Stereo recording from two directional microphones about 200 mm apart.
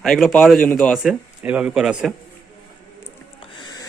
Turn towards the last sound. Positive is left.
turn(degrees=20)  # may be behind; listen again after turning